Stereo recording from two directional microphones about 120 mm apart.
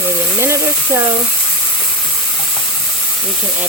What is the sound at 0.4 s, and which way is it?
Speech, 20° right (ahead or behind).